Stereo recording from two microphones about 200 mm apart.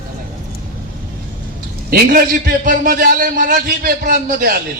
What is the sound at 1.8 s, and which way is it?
A man's voice, 45° right (ahead or behind).